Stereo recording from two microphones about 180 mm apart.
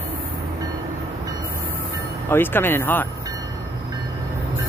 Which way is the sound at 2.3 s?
10° left (ahead or behind).